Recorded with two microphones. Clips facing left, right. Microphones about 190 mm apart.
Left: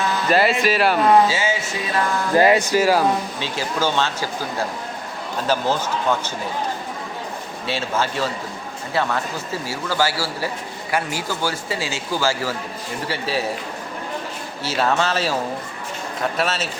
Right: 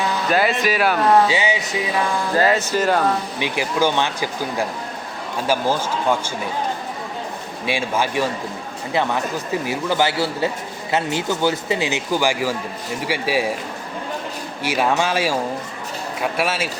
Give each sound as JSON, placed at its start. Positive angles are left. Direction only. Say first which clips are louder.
{"t": 0.3, "sound": "speech", "louder": "left 2 dB", "side_deg": 0}
{"t": 1.3, "sound": "speech", "louder": "right 2 dB", "side_deg": -15}
{"t": 2.3, "sound": "speech", "louder": "left 4 dB", "side_deg": 15}
{"t": 3.3, "sound": "speech", "louder": "right 3 dB", "side_deg": -15}
{"t": 7.7, "sound": "a man's voice", "louder": "right 2 dB", "side_deg": -10}
{"t": 14.6, "sound": "speech", "louder": "right 1 dB", "side_deg": -15}